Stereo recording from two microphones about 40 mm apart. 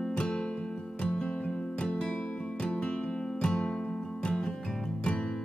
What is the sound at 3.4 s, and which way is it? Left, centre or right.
Music, centre.